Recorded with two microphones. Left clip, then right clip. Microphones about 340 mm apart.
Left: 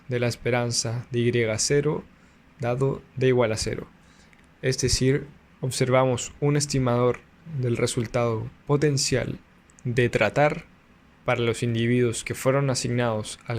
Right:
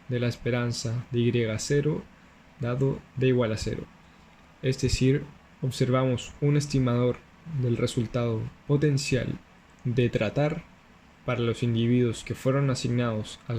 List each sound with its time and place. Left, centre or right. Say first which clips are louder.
0.1 s speech: left 4 dB; centre
8.3 s speech: left 3 dB; left
8.8 s speech: left 3 dB; centre